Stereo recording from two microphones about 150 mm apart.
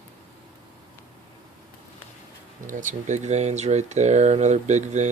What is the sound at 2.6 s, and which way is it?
Speech, 60° right (ahead or behind).